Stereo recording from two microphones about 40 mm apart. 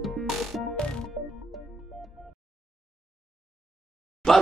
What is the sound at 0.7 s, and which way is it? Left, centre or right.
Music, left.